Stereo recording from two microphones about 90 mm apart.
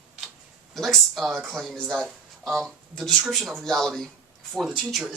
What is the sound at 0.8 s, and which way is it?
Speech, 5° left (ahead or behind).